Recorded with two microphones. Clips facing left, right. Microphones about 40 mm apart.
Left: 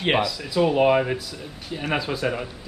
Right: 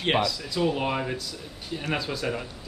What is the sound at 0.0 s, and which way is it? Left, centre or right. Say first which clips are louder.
Speech: left 3 dB; centre.